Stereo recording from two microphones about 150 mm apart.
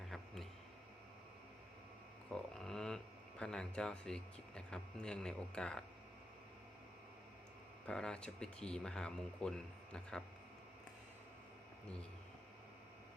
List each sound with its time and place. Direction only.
2.3 s speech: 5° left (ahead or behind)
7.9 s speech: 5° left (ahead or behind)